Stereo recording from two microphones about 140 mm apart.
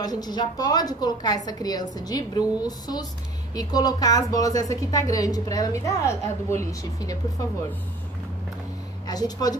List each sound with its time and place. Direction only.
0.0 s a woman's voice: 30° left (ahead or behind)
9.0 s speech: 30° left (ahead or behind)